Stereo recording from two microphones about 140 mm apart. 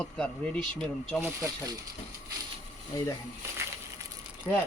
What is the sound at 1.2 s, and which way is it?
Speech, 20° right (ahead or behind).